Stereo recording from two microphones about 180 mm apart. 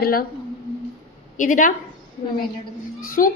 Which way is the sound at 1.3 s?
45° left (ahead or behind).